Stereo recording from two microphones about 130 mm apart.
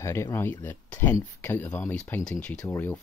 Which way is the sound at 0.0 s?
20° left (ahead or behind).